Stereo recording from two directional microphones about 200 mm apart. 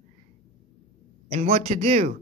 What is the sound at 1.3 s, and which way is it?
Speech, 30° right (ahead or behind).